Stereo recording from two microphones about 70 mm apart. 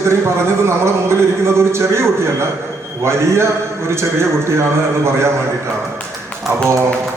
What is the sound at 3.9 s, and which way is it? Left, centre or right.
A man's voice, right.